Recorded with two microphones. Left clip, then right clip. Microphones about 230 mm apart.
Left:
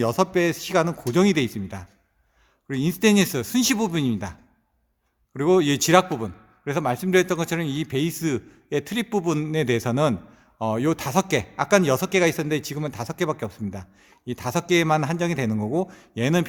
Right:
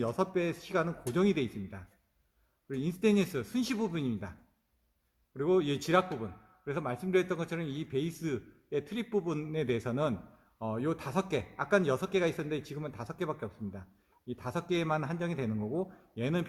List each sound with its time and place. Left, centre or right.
0.0 s a man's voice: left